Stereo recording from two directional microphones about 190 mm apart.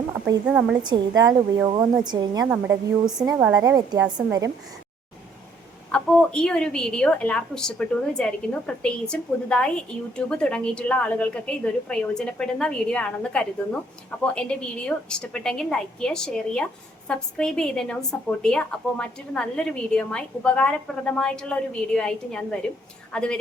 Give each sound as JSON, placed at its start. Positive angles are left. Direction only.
{"t": 0.4, "sound": "a woman's voice", "side_deg": -5}
{"t": 0.8, "sound": "speech", "side_deg": -20}
{"t": 2.5, "sound": "a woman's voice", "side_deg": -5}
{"t": 3.2, "sound": "a woman's voice", "side_deg": -15}
{"t": 5.9, "sound": "a woman's voice", "side_deg": 5}